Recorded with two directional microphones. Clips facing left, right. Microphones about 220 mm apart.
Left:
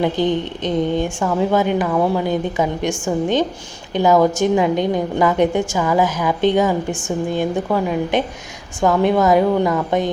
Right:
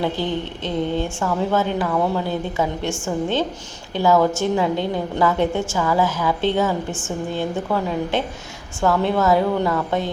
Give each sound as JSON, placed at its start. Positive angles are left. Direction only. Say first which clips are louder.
{"t": 0.0, "sound": "a woman's voice", "louder": "left 5 dB", "side_deg": 15}